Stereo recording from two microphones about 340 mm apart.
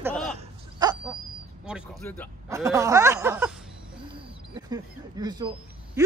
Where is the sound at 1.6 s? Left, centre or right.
Centre.